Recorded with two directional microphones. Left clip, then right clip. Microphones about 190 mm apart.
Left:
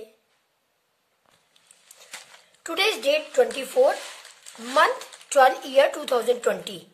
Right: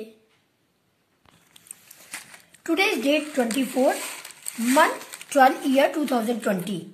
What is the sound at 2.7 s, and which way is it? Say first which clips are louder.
Speech: right 1 dB; 40° left (ahead or behind).